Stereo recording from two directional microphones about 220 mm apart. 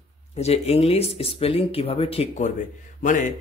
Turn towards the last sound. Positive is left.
turn(degrees=35)  # may be behind; listen again after turning